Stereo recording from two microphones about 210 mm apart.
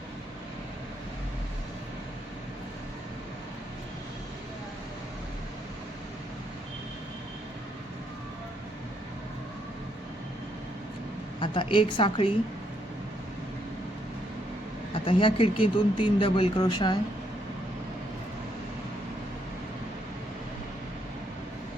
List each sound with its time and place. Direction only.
11.3 s speech: 25° left (ahead or behind)
15.0 s speech: 25° left (ahead or behind)